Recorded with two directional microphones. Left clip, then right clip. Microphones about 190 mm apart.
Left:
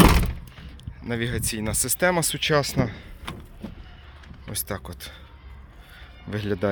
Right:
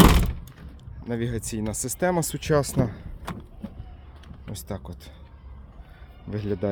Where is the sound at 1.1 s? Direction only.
20° right (ahead or behind).